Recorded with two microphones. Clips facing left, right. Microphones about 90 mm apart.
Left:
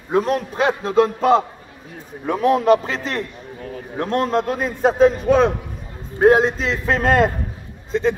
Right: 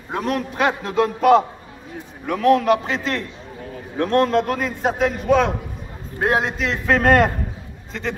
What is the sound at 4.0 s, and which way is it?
Speech, 25° left (ahead or behind).